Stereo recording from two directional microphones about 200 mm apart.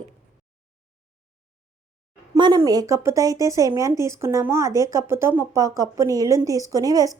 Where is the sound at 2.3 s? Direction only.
20° right (ahead or behind).